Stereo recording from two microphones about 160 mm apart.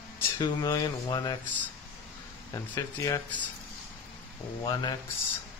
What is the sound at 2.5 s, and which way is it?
Speech, 20° left (ahead or behind).